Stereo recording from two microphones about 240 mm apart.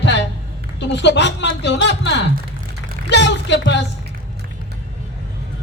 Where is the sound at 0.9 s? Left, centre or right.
Left.